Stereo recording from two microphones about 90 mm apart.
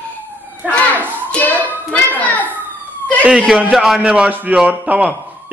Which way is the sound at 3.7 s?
5° right (ahead or behind).